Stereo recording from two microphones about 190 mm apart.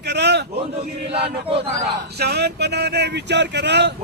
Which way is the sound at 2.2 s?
60° right (ahead or behind).